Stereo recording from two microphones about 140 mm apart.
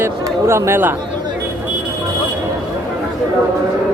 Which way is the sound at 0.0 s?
20° right (ahead or behind).